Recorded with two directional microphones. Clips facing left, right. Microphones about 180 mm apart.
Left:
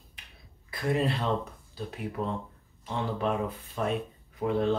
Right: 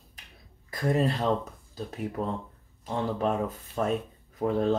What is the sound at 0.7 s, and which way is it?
Speech, 40° right (ahead or behind).